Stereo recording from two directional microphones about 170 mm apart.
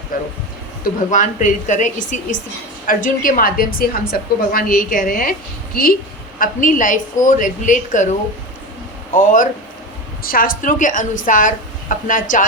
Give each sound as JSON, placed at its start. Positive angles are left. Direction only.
{"t": 0.1, "sound": "a woman's voice", "side_deg": 55}
{"t": 9.1, "sound": "a woman's voice", "side_deg": 50}